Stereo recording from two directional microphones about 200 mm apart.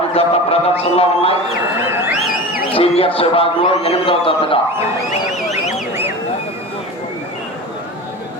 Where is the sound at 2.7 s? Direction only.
30° left (ahead or behind).